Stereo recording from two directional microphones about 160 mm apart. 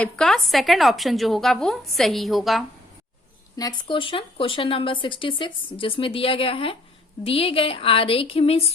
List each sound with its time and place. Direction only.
0.0 s a woman's voice: 5° left (ahead or behind)
3.6 s speech: 30° left (ahead or behind)